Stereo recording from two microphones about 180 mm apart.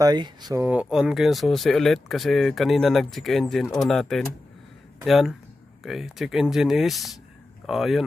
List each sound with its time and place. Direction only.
0.0 s speech: 25° right (ahead or behind)
0.7 s speech: 5° right (ahead or behind)